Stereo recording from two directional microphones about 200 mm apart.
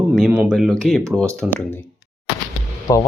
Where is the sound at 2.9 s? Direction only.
15° left (ahead or behind).